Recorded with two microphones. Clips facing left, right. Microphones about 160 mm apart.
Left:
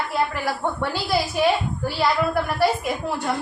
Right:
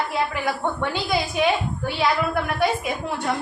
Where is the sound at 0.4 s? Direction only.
5° left (ahead or behind).